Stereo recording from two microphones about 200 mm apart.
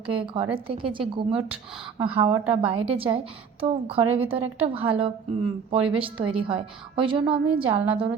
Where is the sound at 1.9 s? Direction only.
25° right (ahead or behind).